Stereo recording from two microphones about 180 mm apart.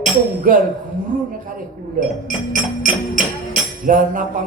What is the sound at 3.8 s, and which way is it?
Speech, 45° right (ahead or behind).